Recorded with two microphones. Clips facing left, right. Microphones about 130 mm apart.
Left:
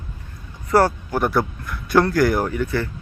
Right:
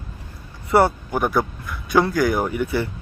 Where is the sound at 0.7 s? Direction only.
Centre (ahead or behind).